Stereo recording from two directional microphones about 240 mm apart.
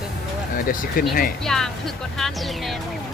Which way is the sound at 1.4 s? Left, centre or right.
Centre.